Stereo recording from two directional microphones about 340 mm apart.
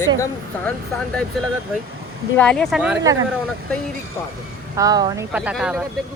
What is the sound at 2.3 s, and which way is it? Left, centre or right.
Speech, centre.